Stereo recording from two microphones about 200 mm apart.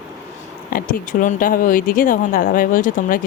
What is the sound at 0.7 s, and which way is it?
A woman's voice, 45° left (ahead or behind).